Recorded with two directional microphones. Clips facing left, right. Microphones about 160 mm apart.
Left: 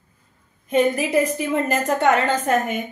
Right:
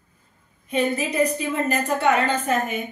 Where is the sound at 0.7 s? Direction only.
80° left.